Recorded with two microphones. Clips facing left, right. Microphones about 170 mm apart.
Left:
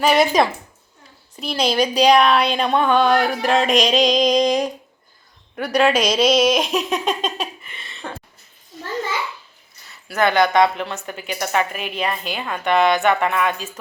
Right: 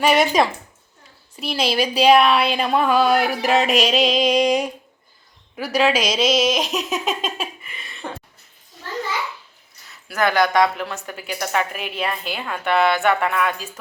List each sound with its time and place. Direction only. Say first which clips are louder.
0.0 s speech: left 1 dB; 5° right (ahead or behind)
8.0 s a sound: right 1 dB; 10° right (ahead or behind)
10.1 s speech: left 2 dB; centre (ahead or behind)
10.3 s speech: left 2 dB; 25° left (ahead or behind)
10.8 s speech: left 1 dB; centre (ahead or behind)